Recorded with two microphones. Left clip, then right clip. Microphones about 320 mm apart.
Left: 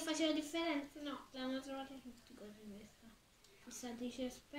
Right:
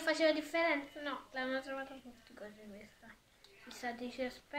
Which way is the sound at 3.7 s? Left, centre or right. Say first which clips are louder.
Right 5 dB; centre.